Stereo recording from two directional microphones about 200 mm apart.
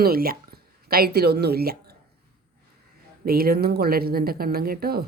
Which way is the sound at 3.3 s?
50° right (ahead or behind).